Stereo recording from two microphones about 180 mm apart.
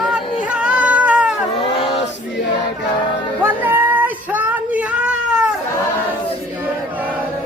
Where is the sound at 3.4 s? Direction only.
10° right (ahead or behind).